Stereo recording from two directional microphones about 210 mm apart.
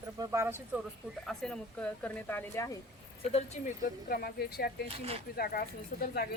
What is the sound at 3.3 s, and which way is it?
Speech, 40° left (ahead or behind).